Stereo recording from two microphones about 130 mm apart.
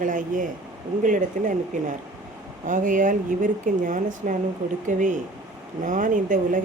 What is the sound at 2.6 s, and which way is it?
Speech, 85° right.